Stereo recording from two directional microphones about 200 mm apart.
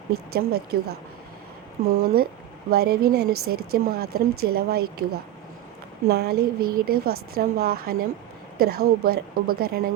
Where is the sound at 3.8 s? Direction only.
50° right (ahead or behind).